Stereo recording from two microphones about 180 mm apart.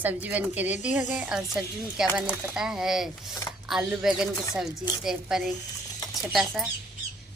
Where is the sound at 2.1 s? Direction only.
5° right (ahead or behind).